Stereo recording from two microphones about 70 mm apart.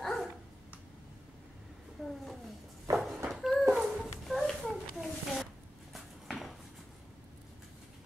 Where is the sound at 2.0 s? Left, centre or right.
Centre.